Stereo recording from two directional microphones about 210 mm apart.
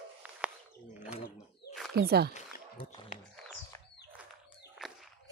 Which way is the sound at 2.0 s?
50° right (ahead or behind).